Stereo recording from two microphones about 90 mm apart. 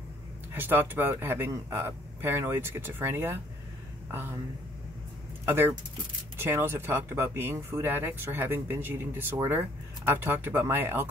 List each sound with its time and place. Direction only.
0.5 s speech: 25° right (ahead or behind)
5.4 s speech: 25° right (ahead or behind)